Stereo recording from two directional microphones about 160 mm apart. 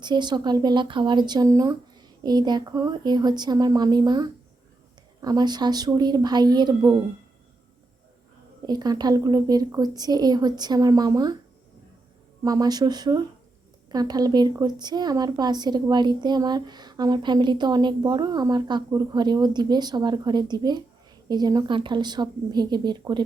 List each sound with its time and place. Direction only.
0.0 s speech: 30° right (ahead or behind)
8.6 s speech: 25° right (ahead or behind)
12.4 s speech: 20° right (ahead or behind)